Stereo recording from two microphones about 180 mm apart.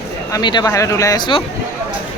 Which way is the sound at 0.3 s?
20° left (ahead or behind).